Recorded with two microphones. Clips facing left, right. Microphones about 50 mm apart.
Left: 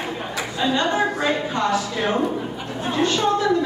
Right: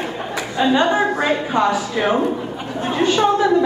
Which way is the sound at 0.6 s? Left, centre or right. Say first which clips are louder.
Right 5 dB; right.